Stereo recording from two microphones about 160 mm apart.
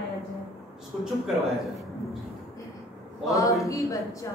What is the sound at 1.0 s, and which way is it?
Speech, centre (ahead or behind).